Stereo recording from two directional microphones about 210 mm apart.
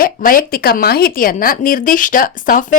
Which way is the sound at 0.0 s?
40° left (ahead or behind).